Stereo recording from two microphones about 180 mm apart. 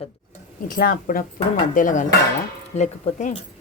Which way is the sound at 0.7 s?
55° left (ahead or behind).